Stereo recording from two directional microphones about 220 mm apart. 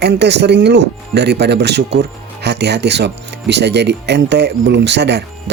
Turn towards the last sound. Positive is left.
turn(degrees=-50)  # may be behind; listen again after turning